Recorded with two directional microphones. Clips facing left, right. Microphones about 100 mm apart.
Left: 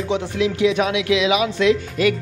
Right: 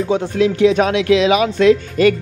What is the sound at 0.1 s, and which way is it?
Speech, 45° right (ahead or behind).